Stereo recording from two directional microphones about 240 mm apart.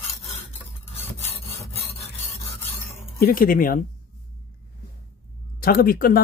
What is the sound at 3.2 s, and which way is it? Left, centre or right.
Speech, left.